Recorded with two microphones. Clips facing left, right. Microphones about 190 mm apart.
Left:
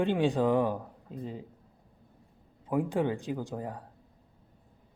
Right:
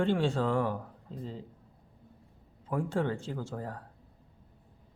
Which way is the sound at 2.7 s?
15° left (ahead or behind).